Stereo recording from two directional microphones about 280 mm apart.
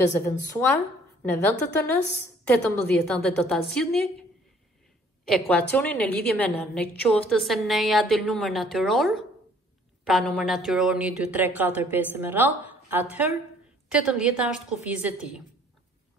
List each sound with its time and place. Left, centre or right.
0.0 s a woman's voice: centre
5.2 s a woman's voice: centre